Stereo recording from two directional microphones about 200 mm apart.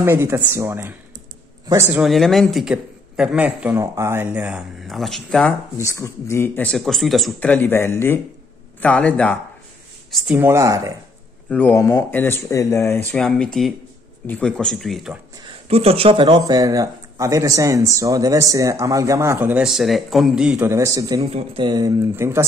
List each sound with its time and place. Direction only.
0.0 s speech: 10° right (ahead or behind)
2.0 s a man's voice: centre (ahead or behind)
5.8 s speech: 15° left (ahead or behind)
10.1 s speech: 5° right (ahead or behind)
11.4 s a man's voice: 10° left (ahead or behind)
15.4 s speech: 30° right (ahead or behind)
21.2 s speech: 30° right (ahead or behind); by 22.5 s 15° right (ahead or behind)